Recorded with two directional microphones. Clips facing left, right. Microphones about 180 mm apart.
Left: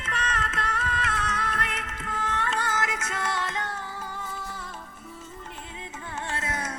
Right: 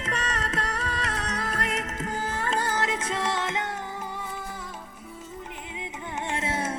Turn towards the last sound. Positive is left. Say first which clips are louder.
# right 4 dB
turn(degrees=-25)  # may be behind; listen again after turning